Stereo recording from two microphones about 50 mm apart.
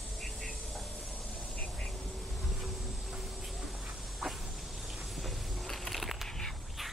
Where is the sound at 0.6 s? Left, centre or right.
Centre.